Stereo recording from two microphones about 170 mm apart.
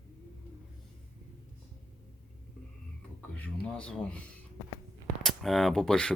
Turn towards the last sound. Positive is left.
turn(degrees=5)  # may be behind; listen again after turning